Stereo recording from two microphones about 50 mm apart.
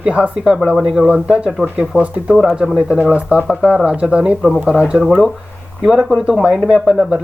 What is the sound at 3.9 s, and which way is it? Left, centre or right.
Speech, centre.